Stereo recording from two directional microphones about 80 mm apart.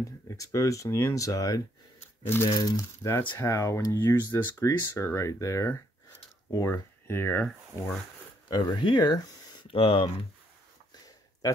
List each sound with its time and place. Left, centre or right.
0.0 s speech: left
3.1 s speech: left
3.9 s speech: left
8.5 s speech: left
8.8 s speech: left
9.7 s speech: left